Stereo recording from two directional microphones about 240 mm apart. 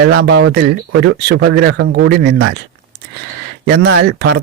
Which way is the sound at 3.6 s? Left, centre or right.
Right.